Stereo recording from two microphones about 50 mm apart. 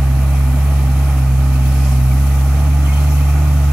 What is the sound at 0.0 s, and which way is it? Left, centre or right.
Vehicle, centre.